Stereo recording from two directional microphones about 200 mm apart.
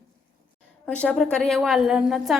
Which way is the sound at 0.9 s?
5° left (ahead or behind).